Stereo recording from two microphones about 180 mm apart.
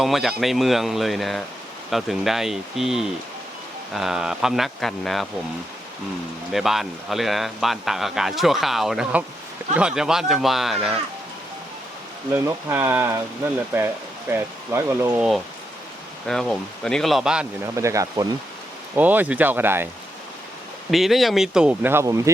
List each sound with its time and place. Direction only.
0.0 s speech: centre (ahead or behind)
6.5 s speech: centre (ahead or behind)
12.3 s speech: 15° right (ahead or behind)
16.2 s speech: 5° left (ahead or behind)
17.7 s speech: 15° right (ahead or behind)
20.9 s speech: centre (ahead or behind)